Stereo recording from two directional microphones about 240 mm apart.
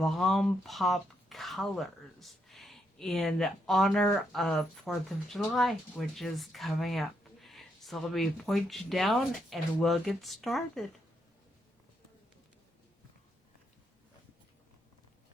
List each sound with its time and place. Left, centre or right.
0.0 s speech: centre